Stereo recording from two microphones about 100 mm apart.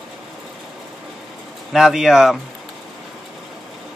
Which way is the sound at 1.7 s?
Centre (ahead or behind).